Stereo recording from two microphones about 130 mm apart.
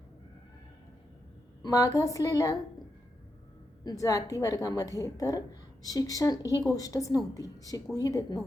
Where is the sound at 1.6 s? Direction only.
30° left (ahead or behind).